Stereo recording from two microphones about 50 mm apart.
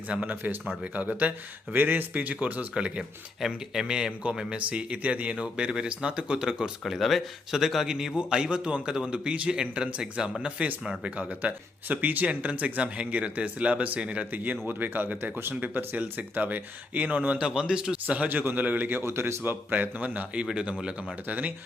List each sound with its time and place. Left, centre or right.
0.1 s speech: right
1.7 s speech: right
2.7 s speech: right
3.0 s speech: centre
14.7 s speech: right
17.5 s speech: centre
18.3 s speech: right
19.0 s a man's voice: right
19.7 s speech: right
21.2 s speech: right